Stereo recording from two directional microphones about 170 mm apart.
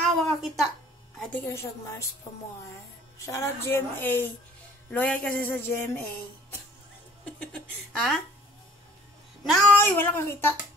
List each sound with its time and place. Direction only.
0.0 s a sound: centre (ahead or behind)
1.3 s speech: 15° left (ahead or behind)
7.2 s speech: 5° left (ahead or behind)
9.4 s speech: centre (ahead or behind)